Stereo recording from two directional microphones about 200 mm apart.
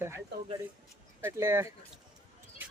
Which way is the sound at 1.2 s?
10° right (ahead or behind).